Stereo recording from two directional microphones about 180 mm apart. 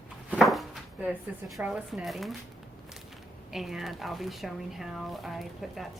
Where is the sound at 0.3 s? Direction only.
Centre (ahead or behind).